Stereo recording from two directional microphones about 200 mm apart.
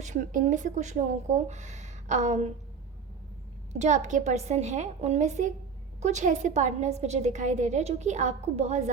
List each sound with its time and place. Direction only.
0.0 s a woman's voice: 40° right (ahead or behind)
3.7 s a woman's voice: 35° right (ahead or behind)